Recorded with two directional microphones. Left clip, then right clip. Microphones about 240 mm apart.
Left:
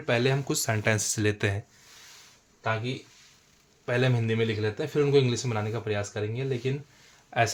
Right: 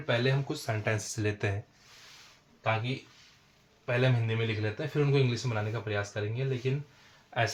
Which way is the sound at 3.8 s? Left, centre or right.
Left.